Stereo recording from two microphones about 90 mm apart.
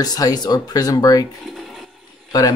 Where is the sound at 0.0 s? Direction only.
45° left (ahead or behind).